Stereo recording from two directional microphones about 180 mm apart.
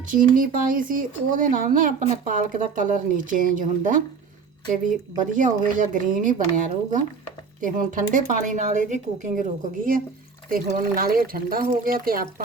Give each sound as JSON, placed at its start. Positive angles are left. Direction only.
{"t": 0.1, "sound": "speech", "side_deg": -50}
{"t": 7.6, "sound": "speech", "side_deg": -45}